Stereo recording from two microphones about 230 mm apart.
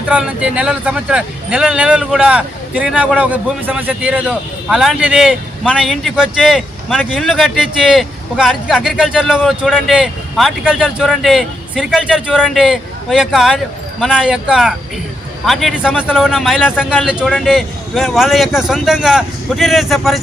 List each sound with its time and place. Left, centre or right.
0.1 s speech: centre